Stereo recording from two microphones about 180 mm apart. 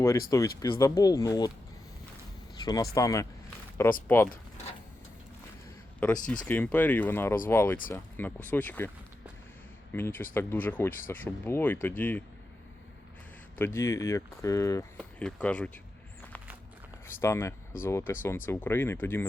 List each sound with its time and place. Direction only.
0.0 s speech: 15° left (ahead or behind)
2.6 s speech: 20° left (ahead or behind)
6.0 s speech: 5° left (ahead or behind)
9.9 s speech: 10° left (ahead or behind)
13.6 s speech: 15° left (ahead or behind)
15.2 s speech: 5° left (ahead or behind)
17.1 s speech: 15° left (ahead or behind)